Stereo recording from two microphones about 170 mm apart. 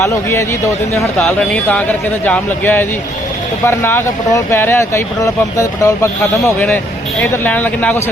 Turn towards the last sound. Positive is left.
turn(degrees=10)  # may be behind; listen again after turning